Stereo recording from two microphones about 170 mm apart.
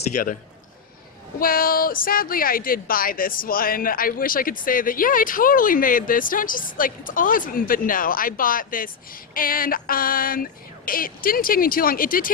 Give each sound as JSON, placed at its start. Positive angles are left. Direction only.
{"t": 0.1, "sound": "a man's voice", "side_deg": 50}
{"t": 1.4, "sound": "speech", "side_deg": 55}